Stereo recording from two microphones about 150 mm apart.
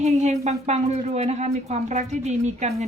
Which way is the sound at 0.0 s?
50° right (ahead or behind).